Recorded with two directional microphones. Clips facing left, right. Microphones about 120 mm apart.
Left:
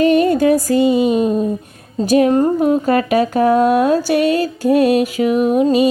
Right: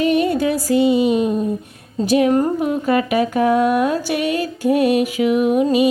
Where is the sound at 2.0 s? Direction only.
40° left (ahead or behind).